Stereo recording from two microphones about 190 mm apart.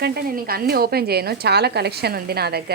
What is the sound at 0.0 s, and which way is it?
Speech, 55° right (ahead or behind).